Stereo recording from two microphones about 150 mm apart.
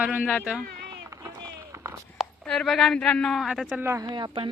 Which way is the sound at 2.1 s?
5° left (ahead or behind).